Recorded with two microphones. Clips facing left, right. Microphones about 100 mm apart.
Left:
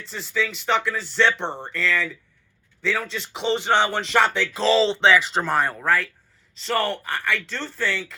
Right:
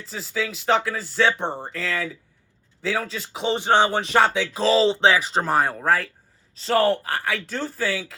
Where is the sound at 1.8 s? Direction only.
45° right (ahead or behind).